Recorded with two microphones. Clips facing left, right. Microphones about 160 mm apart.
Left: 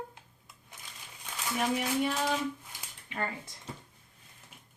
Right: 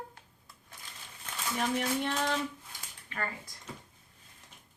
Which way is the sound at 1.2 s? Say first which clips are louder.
Left 1 dB; 5° left (ahead or behind).